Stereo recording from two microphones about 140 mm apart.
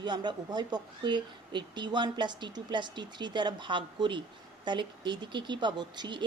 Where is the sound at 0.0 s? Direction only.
35° right (ahead or behind).